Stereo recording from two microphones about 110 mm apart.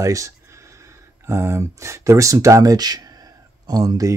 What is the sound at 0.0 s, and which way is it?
Speech, 30° right (ahead or behind).